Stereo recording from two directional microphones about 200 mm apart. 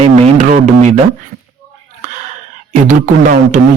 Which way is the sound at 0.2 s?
35° right (ahead or behind).